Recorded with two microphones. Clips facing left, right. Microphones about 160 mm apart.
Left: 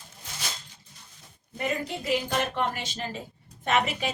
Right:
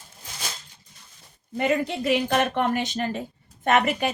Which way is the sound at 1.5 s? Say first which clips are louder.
Right 7 dB; 70° right (ahead or behind).